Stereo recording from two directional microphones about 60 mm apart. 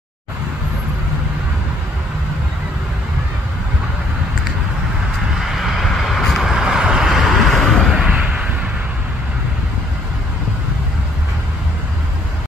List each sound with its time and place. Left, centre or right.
5.5 s vehicle: centre
6.5 s vehicle: centre
7.9 s a sound: centre